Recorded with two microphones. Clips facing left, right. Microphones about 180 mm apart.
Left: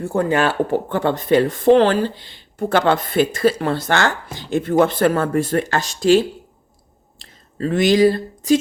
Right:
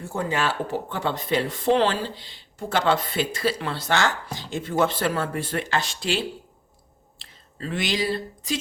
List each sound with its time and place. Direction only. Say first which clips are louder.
0.0 s speech: left 8 dB; 55° left (ahead or behind)